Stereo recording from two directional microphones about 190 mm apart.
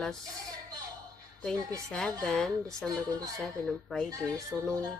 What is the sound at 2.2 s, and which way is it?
Speech, 5° left (ahead or behind).